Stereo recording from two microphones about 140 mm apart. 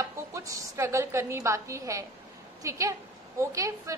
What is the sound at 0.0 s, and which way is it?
A woman's voice, 25° right (ahead or behind).